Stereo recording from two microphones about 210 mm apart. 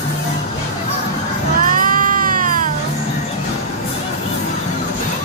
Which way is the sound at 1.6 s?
40° right (ahead or behind).